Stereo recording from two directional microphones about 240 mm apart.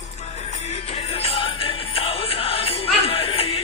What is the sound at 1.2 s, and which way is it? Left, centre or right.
Music, left.